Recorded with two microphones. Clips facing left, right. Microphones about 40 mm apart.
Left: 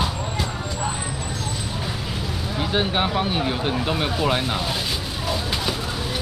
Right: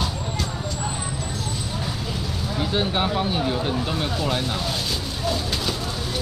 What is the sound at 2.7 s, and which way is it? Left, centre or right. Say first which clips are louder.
Speech: left 2 dB; centre.